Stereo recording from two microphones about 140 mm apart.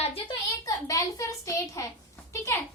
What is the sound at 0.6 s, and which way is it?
A child's voice, 25° left (ahead or behind).